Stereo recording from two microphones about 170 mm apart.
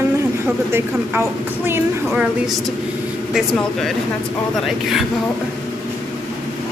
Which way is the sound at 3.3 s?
5° left (ahead or behind).